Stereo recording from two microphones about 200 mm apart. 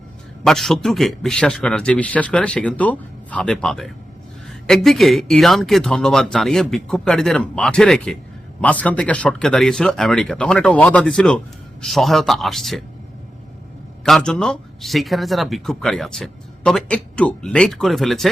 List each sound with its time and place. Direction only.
0.4 s speech: centre (ahead or behind)
14.0 s speech: 5° left (ahead or behind)